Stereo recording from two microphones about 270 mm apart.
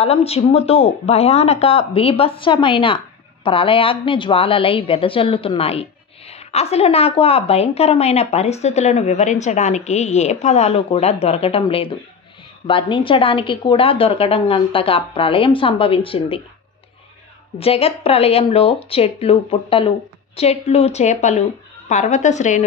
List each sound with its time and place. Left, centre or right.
0.0 s a woman's voice: left
17.6 s a woman's voice: left